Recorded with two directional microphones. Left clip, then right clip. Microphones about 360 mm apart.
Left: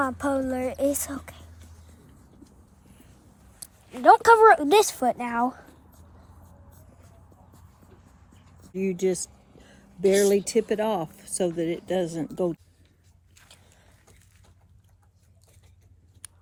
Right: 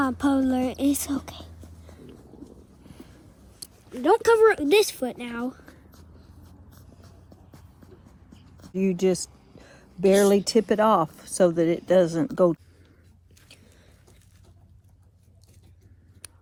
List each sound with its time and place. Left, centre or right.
0.0 s a woman's voice: centre
3.6 s speech: centre
8.7 s a sound: centre
10.4 s speech: centre